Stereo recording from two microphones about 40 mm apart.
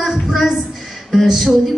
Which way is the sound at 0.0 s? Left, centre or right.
Centre.